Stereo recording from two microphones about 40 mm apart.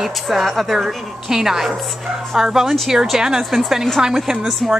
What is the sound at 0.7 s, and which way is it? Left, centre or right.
A woman's voice, centre.